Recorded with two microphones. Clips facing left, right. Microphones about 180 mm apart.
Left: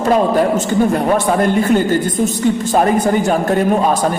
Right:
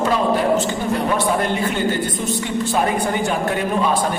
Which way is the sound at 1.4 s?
45° left (ahead or behind).